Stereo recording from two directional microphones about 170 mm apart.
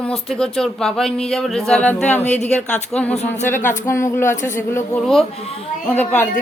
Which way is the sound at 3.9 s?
15° left (ahead or behind).